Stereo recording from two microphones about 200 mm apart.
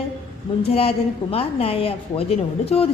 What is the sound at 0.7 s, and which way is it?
A woman's voice, 30° left (ahead or behind).